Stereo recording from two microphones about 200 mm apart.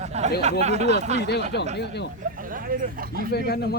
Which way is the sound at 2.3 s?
45° right (ahead or behind).